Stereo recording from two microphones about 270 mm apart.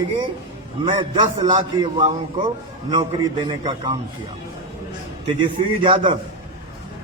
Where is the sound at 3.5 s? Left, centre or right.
Centre.